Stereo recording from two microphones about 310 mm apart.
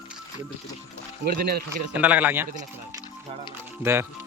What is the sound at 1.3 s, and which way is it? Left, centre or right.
Speech, right.